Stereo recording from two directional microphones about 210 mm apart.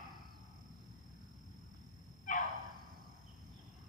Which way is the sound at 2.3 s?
40° left (ahead or behind).